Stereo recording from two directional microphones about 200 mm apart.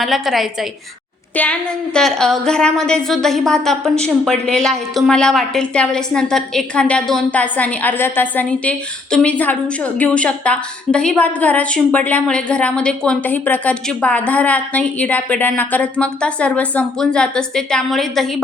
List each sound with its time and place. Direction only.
0.0 s a woman's voice: centre (ahead or behind)